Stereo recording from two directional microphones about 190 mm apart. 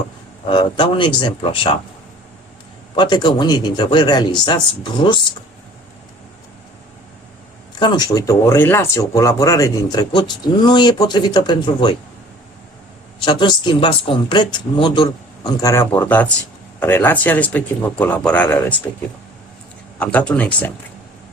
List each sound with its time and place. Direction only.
0.4 s speech: 25° left (ahead or behind)
2.9 s speech: 25° left (ahead or behind)
7.8 s speech: 20° left (ahead or behind)
13.2 s speech: 25° left (ahead or behind)
15.6 s speech: 15° left (ahead or behind)
20.0 s speech: 5° left (ahead or behind)